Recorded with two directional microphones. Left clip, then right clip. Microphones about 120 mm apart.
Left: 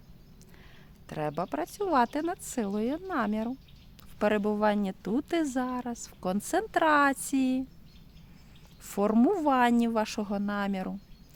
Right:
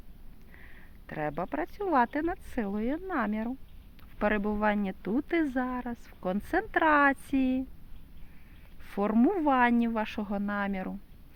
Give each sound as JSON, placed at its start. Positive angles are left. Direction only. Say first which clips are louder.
{"t": 1.0, "sound": "a woman's voice", "louder": "left 1 dB", "side_deg": 30}
{"t": 8.8, "sound": "a woman's voice", "louder": "left 1 dB", "side_deg": 35}